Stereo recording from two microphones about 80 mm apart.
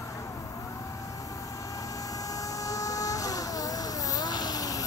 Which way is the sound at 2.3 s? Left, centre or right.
Left.